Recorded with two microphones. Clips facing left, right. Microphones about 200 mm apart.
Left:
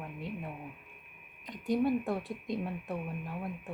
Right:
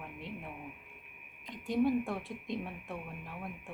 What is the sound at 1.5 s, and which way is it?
Speech, centre (ahead or behind).